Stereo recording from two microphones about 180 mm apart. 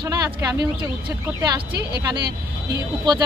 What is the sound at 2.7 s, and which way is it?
Speech, 25° right (ahead or behind).